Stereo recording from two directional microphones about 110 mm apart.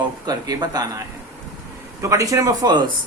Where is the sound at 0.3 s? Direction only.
35° right (ahead or behind).